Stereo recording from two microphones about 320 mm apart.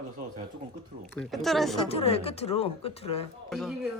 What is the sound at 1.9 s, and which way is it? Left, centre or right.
Speech, centre.